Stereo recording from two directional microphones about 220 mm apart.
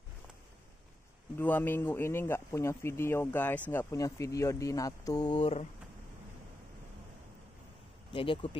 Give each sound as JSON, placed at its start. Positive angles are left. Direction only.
{"t": 1.4, "sound": "speech", "side_deg": 10}
{"t": 8.1, "sound": "speech", "side_deg": 25}